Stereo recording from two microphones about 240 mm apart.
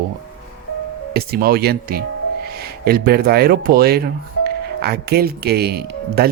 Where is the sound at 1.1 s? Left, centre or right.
Right.